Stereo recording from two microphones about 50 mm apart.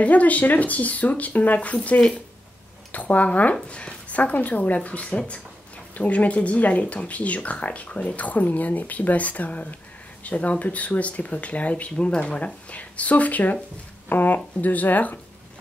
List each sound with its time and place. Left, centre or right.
0.0 s speech: left